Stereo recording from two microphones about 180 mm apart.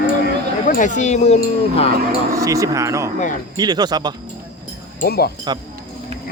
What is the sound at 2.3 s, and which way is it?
Speech, 20° right (ahead or behind).